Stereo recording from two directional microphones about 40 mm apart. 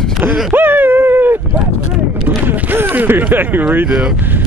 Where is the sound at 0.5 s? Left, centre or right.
Right.